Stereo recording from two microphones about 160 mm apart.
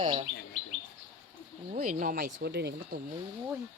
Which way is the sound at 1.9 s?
60° right (ahead or behind).